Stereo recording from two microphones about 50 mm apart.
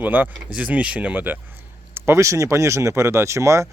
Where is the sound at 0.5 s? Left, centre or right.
Right.